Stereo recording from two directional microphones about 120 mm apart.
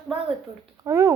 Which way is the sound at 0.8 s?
25° right (ahead or behind).